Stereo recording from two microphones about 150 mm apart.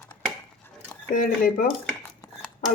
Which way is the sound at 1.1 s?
70° left (ahead or behind).